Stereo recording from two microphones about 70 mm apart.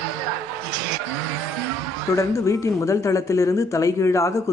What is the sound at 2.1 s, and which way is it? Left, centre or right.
Speech, left.